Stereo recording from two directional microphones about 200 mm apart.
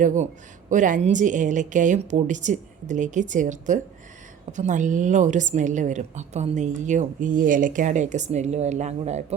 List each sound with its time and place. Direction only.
0.0 s a woman's voice: 40° right (ahead or behind)